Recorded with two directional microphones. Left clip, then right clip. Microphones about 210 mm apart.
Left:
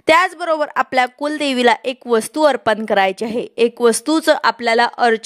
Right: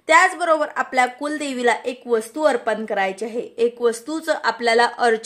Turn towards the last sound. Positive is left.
turn(degrees=35)  # may be behind; listen again after turning